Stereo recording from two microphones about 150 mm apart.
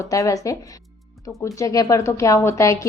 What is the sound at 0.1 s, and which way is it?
Speech, 20° left (ahead or behind).